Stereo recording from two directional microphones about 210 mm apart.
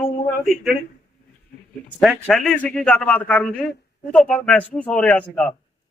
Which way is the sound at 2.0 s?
Centre (ahead or behind).